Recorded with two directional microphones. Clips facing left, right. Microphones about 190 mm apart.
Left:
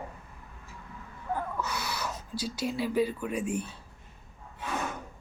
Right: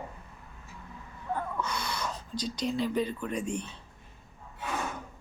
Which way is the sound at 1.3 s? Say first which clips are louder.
Even; 5° left (ahead or behind).